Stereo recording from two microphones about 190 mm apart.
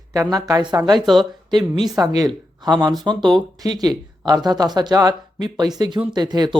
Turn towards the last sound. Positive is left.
turn(degrees=-20)  # may be behind; listen again after turning